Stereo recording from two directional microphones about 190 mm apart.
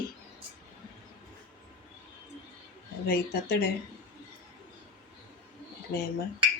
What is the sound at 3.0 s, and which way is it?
Speech, 55° left (ahead or behind).